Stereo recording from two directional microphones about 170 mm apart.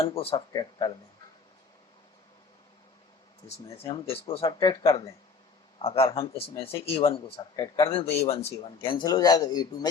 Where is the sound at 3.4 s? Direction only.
20° left (ahead or behind).